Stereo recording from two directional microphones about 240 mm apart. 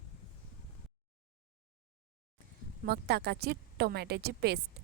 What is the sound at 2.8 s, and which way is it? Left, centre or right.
A woman's voice, right.